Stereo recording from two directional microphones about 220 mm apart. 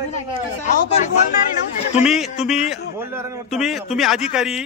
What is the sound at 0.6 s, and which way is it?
Speech, 35° left (ahead or behind).